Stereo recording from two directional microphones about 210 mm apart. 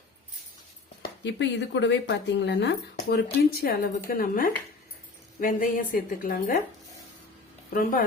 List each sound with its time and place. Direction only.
1.2 s a woman's voice: 55° left (ahead or behind)
7.7 s a woman's voice: 40° left (ahead or behind)